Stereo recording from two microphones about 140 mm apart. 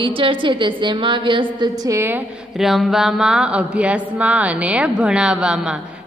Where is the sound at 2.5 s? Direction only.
Centre (ahead or behind).